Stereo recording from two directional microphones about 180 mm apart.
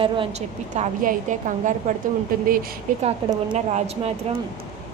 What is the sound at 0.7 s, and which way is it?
A woman's voice, 45° right (ahead or behind).